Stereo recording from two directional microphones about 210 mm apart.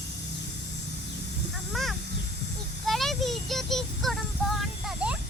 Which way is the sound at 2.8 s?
Centre (ahead or behind).